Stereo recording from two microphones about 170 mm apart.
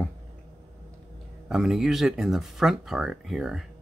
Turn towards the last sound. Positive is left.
turn(degrees=0)  # may be behind; listen again after turning